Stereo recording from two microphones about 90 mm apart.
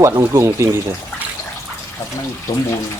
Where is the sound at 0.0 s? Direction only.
35° right (ahead or behind).